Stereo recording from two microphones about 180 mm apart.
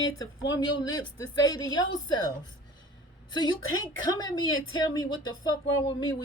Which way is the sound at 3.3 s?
20° left (ahead or behind).